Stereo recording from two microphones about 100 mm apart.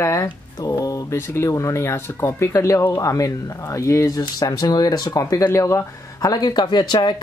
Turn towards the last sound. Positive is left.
turn(degrees=45)  # may be behind; listen again after turning